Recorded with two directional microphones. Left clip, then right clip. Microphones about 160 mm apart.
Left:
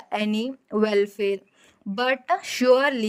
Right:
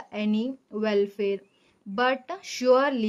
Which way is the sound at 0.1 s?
45° left (ahead or behind).